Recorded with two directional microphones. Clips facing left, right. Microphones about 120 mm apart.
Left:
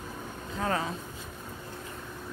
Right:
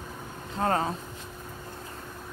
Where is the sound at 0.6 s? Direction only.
40° right (ahead or behind).